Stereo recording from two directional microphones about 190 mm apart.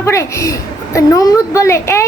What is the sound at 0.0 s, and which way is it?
A woman's voice, 15° left (ahead or behind).